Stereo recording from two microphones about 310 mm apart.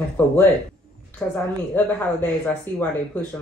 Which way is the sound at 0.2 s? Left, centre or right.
Centre.